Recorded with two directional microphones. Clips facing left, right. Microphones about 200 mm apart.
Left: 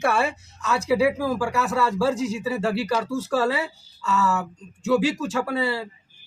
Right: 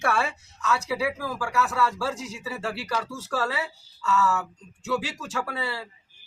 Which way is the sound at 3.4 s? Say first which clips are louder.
Left 4 dB; 20° left (ahead or behind).